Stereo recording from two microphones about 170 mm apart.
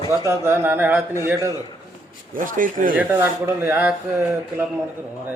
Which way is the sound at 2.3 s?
50° right (ahead or behind).